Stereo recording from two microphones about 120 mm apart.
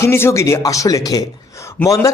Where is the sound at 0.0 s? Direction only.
20° left (ahead or behind).